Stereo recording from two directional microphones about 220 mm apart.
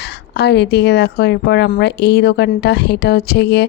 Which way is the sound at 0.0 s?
50° left (ahead or behind).